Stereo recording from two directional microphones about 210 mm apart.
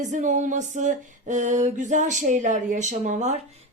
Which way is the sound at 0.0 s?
35° right (ahead or behind).